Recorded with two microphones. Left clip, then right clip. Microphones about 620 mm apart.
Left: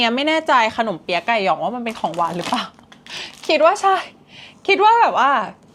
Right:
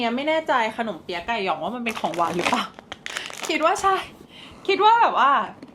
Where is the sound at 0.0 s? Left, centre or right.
Left.